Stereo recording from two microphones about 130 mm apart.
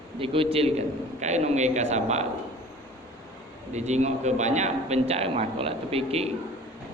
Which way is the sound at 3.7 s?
60° right (ahead or behind).